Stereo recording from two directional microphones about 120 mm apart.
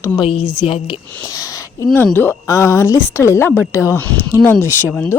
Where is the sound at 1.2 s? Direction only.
30° left (ahead or behind).